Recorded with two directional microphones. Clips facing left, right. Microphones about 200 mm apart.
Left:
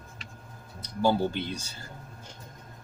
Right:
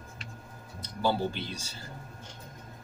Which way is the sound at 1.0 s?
50° left (ahead or behind).